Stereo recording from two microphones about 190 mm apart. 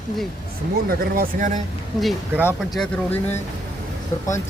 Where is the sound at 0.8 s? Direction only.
50° right (ahead or behind).